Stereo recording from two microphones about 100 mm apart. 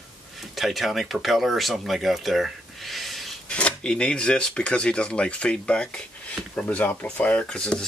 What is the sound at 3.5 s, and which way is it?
Speech, 10° left (ahead or behind).